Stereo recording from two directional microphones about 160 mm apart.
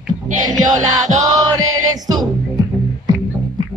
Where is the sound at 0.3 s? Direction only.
55° right (ahead or behind).